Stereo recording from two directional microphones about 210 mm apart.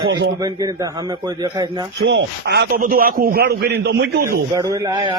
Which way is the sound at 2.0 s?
55° right (ahead or behind).